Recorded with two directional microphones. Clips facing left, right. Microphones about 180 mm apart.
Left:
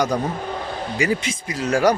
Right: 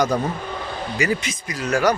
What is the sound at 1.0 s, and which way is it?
Speech, 30° left (ahead or behind).